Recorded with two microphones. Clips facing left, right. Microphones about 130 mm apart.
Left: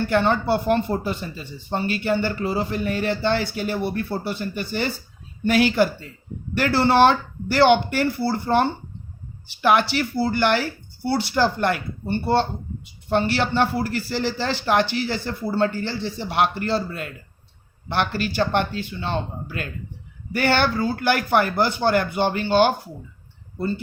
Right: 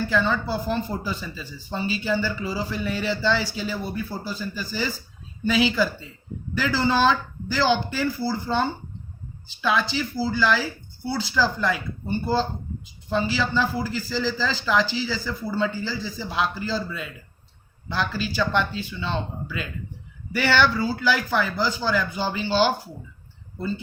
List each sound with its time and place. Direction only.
0.0 s speech: 65° left (ahead or behind); by 11.2 s 80° left
11.3 s speech: 70° left (ahead or behind)